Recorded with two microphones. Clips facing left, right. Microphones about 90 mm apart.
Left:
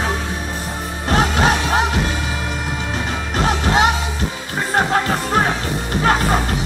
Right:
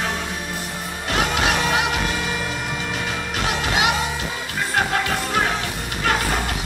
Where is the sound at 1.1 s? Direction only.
40° left (ahead or behind).